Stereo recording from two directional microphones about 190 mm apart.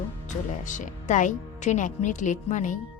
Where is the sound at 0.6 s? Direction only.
40° left (ahead or behind).